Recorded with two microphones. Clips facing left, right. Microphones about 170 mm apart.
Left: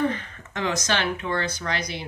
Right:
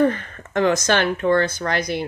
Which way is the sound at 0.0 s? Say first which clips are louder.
Right 7 dB; 50° right (ahead or behind).